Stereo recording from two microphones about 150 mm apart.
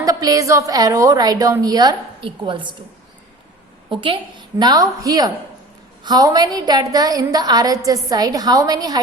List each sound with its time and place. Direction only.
0.0 s a woman's voice: 25° right (ahead or behind)
3.8 s a woman's voice: 35° right (ahead or behind)
4.5 s a woman's voice: 25° right (ahead or behind)